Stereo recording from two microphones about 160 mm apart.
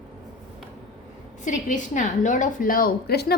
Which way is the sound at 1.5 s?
50° left (ahead or behind).